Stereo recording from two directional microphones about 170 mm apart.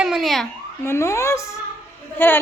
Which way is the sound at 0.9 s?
15° left (ahead or behind).